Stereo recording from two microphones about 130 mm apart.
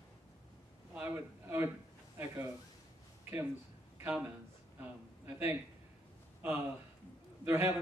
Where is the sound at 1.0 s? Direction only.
15° right (ahead or behind).